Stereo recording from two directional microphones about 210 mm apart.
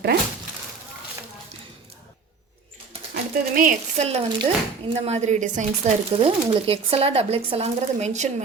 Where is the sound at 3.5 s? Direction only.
40° right (ahead or behind).